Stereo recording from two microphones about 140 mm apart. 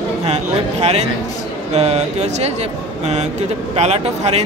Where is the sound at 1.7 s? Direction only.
55° right (ahead or behind).